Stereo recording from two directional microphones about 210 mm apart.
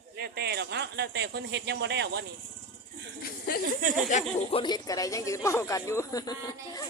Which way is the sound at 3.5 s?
45° left (ahead or behind).